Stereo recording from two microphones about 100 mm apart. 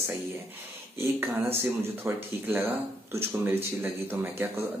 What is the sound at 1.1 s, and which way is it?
Speech, 25° right (ahead or behind).